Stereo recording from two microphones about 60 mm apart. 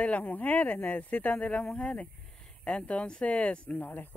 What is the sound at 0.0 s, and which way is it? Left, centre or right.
Speech, left.